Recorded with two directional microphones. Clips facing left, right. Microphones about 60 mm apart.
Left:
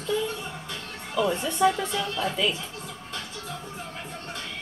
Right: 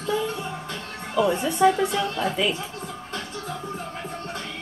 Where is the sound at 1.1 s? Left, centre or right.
Centre.